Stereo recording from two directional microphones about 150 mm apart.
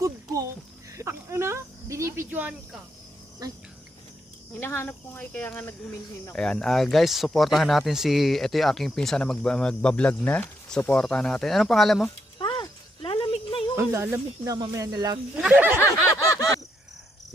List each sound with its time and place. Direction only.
0.9 s cricket: 15° right (ahead or behind)
4.6 s speech: 15° left (ahead or behind)
12.4 s a sound: 30° left (ahead or behind)
13.7 s speech: 15° right (ahead or behind)
15.4 s speech: 10° right (ahead or behind)
15.8 s a sound: 20° left (ahead or behind)